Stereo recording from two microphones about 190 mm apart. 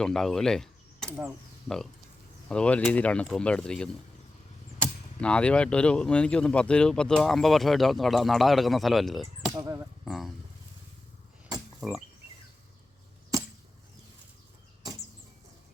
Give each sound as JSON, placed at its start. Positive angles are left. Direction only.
{"t": 0.0, "sound": "speech", "side_deg": 0}
{"t": 5.2, "sound": "speech", "side_deg": 5}
{"t": 9.5, "sound": "speech", "side_deg": -15}
{"t": 10.1, "sound": "speech", "side_deg": 0}
{"t": 11.8, "sound": "a sound", "side_deg": 0}